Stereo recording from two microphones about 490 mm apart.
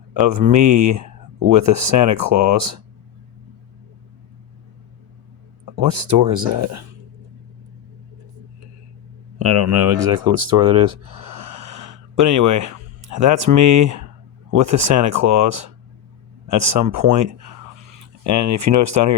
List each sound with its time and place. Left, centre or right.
0.2 s speech: right
5.7 s speech: right
9.4 s speech: right
16.9 s speech: right